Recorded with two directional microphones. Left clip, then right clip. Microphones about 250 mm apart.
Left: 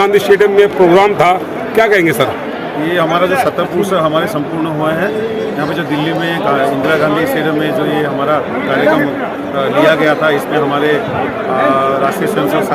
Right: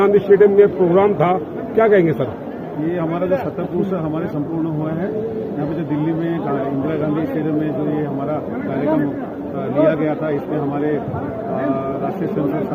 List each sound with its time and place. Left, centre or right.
0.0 s a man's voice: centre
2.9 s a man's voice: centre
9.8 s a man's voice: centre